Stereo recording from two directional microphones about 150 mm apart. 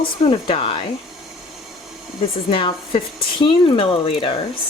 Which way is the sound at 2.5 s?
35° left (ahead or behind).